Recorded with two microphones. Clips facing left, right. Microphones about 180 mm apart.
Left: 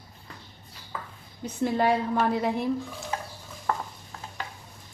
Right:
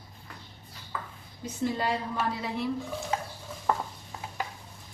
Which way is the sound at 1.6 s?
55° left (ahead or behind).